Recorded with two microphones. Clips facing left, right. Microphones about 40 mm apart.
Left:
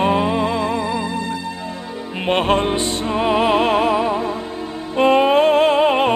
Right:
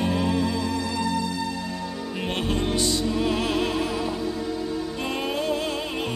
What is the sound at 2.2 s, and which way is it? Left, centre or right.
Music, left.